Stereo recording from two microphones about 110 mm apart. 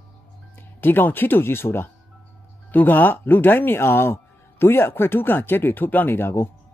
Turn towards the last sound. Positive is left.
turn(degrees=20)  # may be behind; listen again after turning